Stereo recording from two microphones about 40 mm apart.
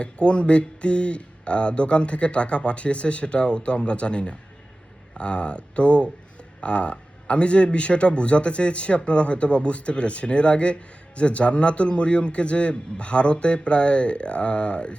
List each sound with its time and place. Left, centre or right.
0.0 s speech: left